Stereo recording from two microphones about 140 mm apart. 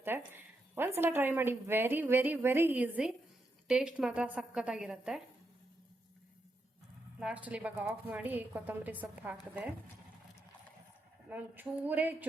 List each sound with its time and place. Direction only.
0.3 s a woman's voice: 15° right (ahead or behind)
7.2 s speech: 10° right (ahead or behind)
11.3 s speech: 10° right (ahead or behind)